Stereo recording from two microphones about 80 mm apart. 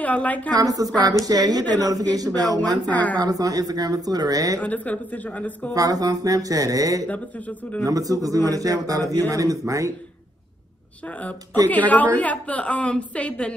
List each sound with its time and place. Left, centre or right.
0.0 s a woman's voice: centre
0.6 s speech: right
2.9 s a woman's voice: centre
3.2 s speech: right
4.6 s a woman's voice: centre
5.7 s speech: right
7.1 s a woman's voice: centre
7.8 s speech: right
11.1 s a woman's voice: centre